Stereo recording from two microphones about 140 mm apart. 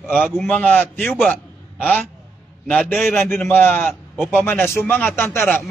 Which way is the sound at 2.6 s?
5° left (ahead or behind).